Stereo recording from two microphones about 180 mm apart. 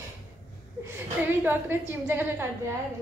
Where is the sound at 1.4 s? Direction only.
10° right (ahead or behind).